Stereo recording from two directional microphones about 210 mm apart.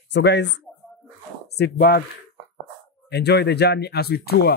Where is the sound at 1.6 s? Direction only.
50° left (ahead or behind).